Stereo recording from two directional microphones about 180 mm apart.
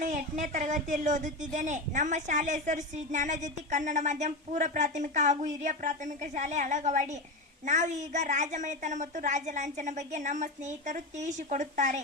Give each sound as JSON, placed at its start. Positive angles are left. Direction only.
{"t": 0.0, "sound": "speech", "side_deg": -45}